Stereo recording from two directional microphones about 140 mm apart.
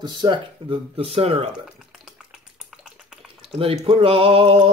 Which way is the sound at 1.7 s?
Centre (ahead or behind).